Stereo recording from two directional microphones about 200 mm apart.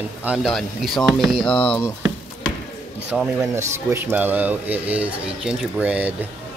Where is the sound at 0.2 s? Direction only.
Centre (ahead or behind).